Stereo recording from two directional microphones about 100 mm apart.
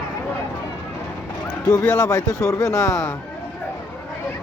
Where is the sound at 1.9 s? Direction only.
35° left (ahead or behind).